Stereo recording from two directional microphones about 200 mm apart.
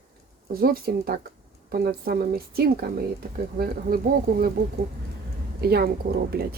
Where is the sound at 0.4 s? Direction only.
50° right (ahead or behind).